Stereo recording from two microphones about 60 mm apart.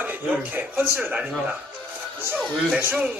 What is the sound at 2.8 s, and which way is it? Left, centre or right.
Speech, right.